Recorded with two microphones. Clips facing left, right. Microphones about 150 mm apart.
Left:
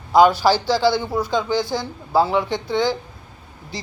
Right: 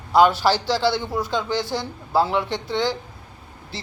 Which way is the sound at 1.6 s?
40° left (ahead or behind).